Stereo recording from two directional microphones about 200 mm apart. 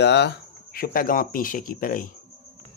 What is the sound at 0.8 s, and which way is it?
Speech, 45° left (ahead or behind).